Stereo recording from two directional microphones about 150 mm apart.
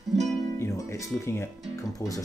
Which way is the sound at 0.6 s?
20° left (ahead or behind).